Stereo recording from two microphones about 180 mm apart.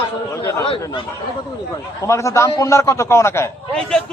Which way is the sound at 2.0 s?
15° left (ahead or behind).